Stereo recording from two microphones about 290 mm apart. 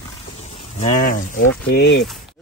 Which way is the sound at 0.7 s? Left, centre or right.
Left.